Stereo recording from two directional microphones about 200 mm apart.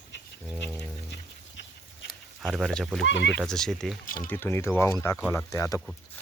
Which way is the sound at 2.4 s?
Centre (ahead or behind).